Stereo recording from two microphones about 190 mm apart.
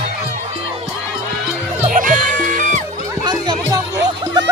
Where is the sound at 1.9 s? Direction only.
45° right (ahead or behind).